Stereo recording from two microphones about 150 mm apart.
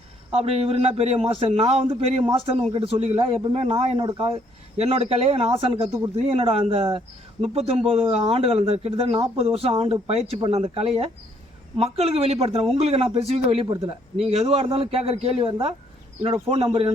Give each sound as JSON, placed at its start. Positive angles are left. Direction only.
{"t": 0.3, "sound": "speech", "side_deg": -40}